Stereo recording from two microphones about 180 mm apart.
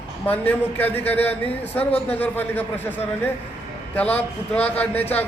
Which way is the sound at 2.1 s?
10° left (ahead or behind).